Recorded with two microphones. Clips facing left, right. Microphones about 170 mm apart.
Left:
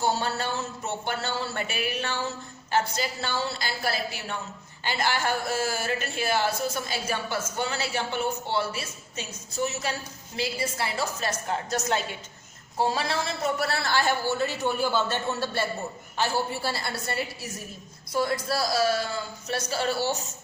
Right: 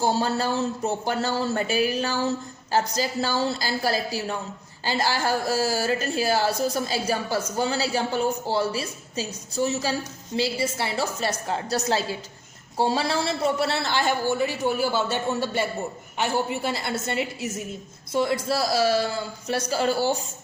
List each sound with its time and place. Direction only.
0.0 s a woman's voice: 35° right (ahead or behind)